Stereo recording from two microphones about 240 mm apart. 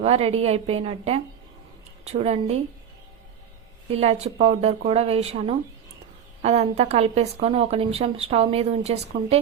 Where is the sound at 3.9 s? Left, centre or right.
Right.